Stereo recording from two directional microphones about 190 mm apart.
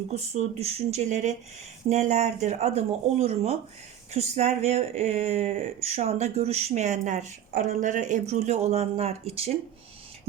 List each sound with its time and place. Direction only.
0.1 s speech: 35° right (ahead or behind)